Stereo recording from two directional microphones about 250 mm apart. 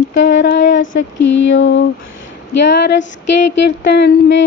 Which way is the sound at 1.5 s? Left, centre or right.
Left.